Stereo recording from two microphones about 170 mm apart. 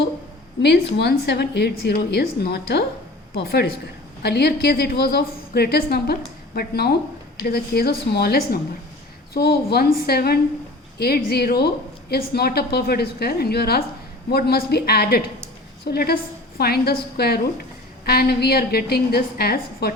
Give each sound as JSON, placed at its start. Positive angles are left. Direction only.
{"t": 0.6, "sound": "a woman's voice", "side_deg": 75}